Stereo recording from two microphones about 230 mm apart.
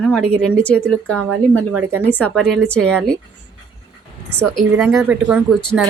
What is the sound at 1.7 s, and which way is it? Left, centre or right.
Speech, centre.